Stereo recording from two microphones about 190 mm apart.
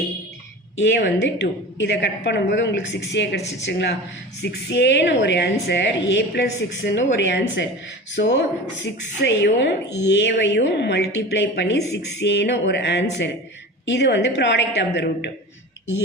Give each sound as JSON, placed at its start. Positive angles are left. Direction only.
{"t": 0.8, "sound": "a woman's voice", "side_deg": 65}